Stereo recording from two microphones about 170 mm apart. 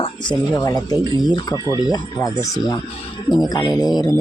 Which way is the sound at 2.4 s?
20° left (ahead or behind).